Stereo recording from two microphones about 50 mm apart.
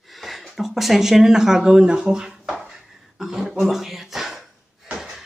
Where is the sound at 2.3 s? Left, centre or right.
Centre.